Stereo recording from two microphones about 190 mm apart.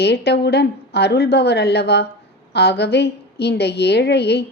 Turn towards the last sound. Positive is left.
turn(degrees=60)  # may be behind; listen again after turning